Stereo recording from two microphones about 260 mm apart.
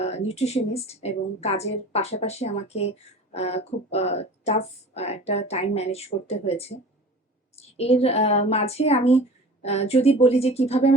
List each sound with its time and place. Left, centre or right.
0.0 s speech: left